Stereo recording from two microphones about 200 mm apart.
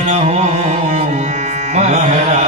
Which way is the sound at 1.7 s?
35° right (ahead or behind).